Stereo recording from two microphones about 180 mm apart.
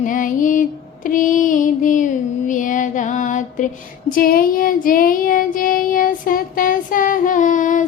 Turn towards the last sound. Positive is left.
turn(degrees=45)  # may be behind; listen again after turning